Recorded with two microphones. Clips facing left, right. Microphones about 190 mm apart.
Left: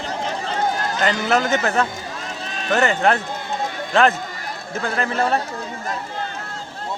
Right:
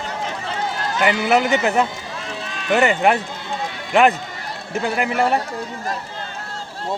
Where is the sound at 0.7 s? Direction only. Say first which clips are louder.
Left 1 dB; 45° left (ahead or behind).